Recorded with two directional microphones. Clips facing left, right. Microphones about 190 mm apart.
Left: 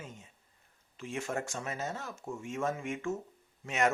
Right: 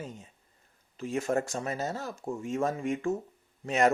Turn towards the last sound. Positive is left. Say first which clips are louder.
# right 5 dB
turn(degrees=-35)  # may be behind; listen again after turning